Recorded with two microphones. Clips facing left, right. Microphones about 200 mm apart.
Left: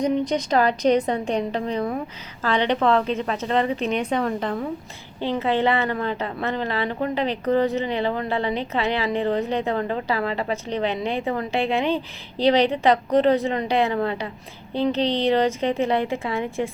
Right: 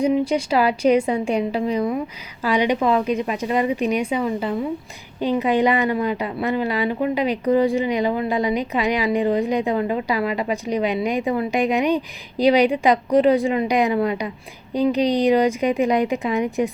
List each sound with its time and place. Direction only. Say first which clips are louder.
0.0 s a woman's voice: right 3 dB; 10° right (ahead or behind)